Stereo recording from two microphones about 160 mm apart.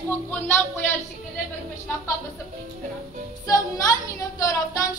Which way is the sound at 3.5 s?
20° left (ahead or behind).